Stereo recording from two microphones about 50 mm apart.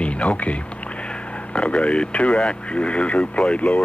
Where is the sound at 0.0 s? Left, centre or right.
Left.